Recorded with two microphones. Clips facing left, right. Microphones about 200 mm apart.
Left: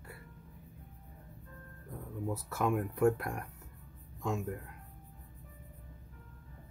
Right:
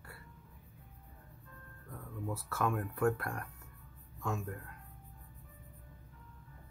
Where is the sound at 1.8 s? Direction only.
20° left (ahead or behind).